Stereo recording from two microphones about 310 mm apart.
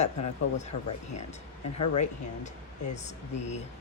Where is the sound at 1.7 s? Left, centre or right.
Left.